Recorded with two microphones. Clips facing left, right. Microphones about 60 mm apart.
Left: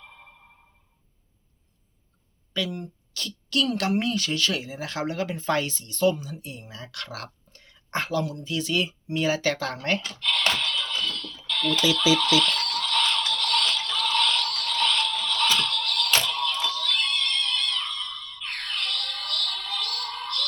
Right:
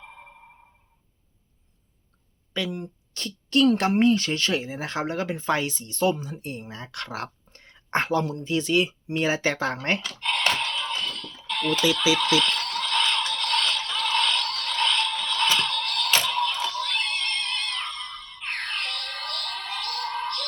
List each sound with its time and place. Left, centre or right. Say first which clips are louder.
0.0 s sonar: right 3 dB; right
2.5 s a woman's voice: even; right
10.4 s fire alarm: right 2 dB; right
16.2 s music: right 2 dB; right